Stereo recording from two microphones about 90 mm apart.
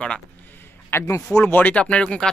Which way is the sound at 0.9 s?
30° left (ahead or behind).